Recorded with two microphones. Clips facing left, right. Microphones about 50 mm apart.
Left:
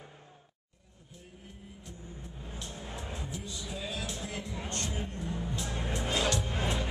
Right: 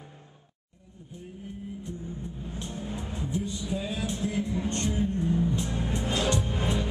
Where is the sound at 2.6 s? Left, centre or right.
Right.